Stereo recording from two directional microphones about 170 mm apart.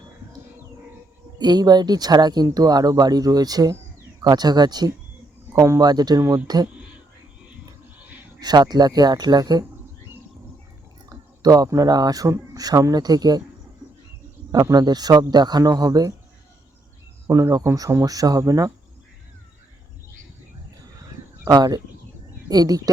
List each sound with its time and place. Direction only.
1.4 s speech: 25° right (ahead or behind)
8.4 s speech: 25° right (ahead or behind)
11.1 s speech: 20° right (ahead or behind)
14.5 s speech: 20° right (ahead or behind)
17.2 s speech: 15° right (ahead or behind)
21.4 s speech: 20° right (ahead or behind)